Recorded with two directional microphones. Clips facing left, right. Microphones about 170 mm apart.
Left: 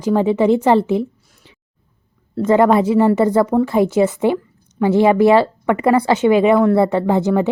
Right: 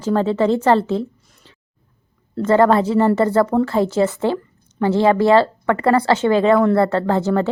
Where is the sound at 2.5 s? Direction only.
15° left (ahead or behind).